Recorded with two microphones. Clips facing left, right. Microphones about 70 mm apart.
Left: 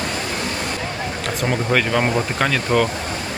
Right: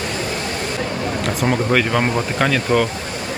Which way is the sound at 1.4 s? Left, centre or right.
Centre.